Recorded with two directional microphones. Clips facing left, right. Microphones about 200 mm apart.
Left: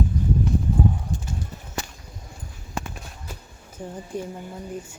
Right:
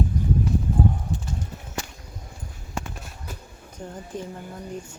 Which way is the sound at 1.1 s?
45° left (ahead or behind).